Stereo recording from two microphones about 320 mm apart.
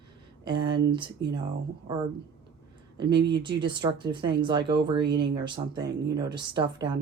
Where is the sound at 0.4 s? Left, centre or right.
Centre.